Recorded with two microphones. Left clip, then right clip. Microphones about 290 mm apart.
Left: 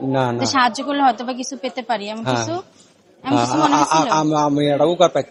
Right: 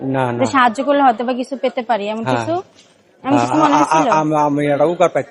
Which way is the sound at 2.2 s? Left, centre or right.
Left.